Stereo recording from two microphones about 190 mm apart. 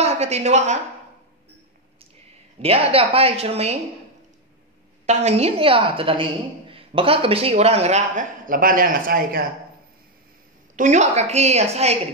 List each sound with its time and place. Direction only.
0.0 s a woman's voice: 35° right (ahead or behind)
2.6 s a man's voice: 30° right (ahead or behind)
5.0 s a woman's voice: 35° right (ahead or behind); by 9.5 s 50° right (ahead or behind)
10.8 s a man's voice: 40° right (ahead or behind)